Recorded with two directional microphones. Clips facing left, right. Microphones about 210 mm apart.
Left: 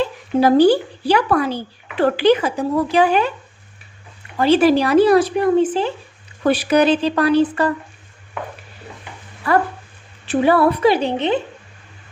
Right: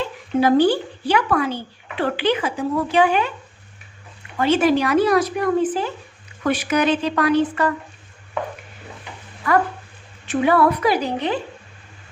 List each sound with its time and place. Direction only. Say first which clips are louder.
0.3 s speech: left 3 dB; 35° left (ahead or behind)
4.4 s speech: left 3 dB; 35° left (ahead or behind)
9.5 s a woman's voice: left 1 dB; 30° left (ahead or behind)